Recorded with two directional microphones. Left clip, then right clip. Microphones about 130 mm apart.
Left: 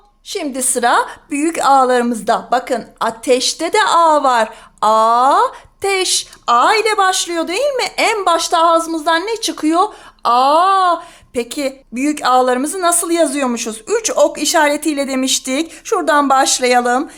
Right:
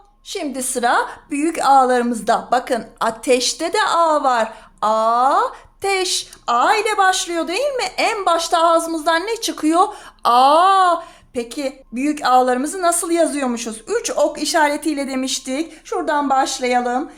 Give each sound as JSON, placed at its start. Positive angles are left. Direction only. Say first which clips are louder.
{"t": 0.3, "sound": "a woman's voice", "louder": "left 4 dB", "side_deg": 30}
{"t": 11.3, "sound": "a woman's voice", "louder": "left 4 dB", "side_deg": 40}